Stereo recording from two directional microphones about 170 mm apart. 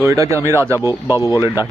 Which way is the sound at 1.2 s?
20° left (ahead or behind).